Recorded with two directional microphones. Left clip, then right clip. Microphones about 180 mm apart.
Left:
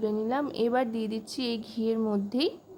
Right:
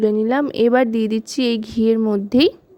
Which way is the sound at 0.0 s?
40° right (ahead or behind).